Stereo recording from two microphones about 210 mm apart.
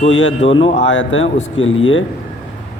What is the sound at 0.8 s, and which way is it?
A man's voice, 65° left (ahead or behind).